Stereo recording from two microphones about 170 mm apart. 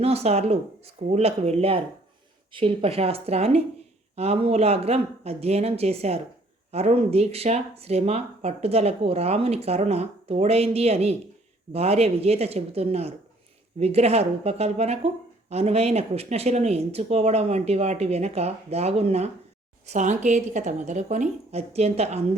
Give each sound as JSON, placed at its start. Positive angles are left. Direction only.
{"t": 0.0, "sound": "a woman's voice", "side_deg": -40}